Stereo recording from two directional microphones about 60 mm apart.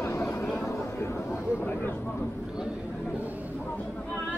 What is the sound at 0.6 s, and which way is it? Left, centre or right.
Chatter, left.